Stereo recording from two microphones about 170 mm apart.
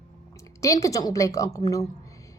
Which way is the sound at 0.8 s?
20° left (ahead or behind).